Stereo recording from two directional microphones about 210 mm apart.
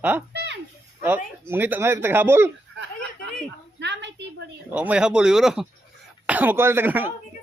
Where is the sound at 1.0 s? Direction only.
10° right (ahead or behind).